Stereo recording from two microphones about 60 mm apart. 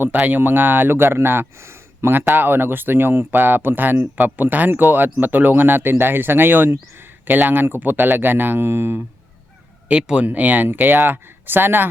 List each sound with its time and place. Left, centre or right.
0.3 s speech: right
2.1 s speech: right
9.9 s speech: centre
10.2 s speech: right